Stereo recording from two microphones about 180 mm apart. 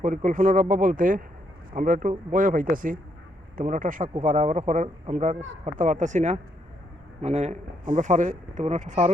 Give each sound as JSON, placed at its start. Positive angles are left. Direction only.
{"t": 0.0, "sound": "speech", "side_deg": -45}